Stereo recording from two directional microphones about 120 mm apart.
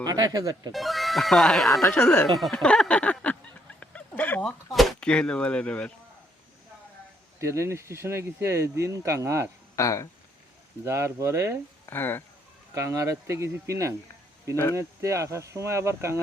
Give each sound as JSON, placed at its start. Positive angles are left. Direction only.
{"t": 0.0, "sound": "speech", "side_deg": -35}
{"t": 0.7, "sound": "speech", "side_deg": 0}
{"t": 2.4, "sound": "a sound", "side_deg": 5}
{"t": 3.8, "sound": "dog", "side_deg": 15}
{"t": 4.7, "sound": "speech", "side_deg": 0}
{"t": 7.3, "sound": "speech", "side_deg": -25}
{"t": 9.7, "sound": "speech", "side_deg": 25}
{"t": 10.8, "sound": "speech", "side_deg": -25}
{"t": 11.9, "sound": "a sound", "side_deg": 15}
{"t": 12.7, "sound": "speech", "side_deg": -25}
{"t": 14.5, "sound": "speech", "side_deg": 25}
{"t": 14.8, "sound": "speech", "side_deg": -25}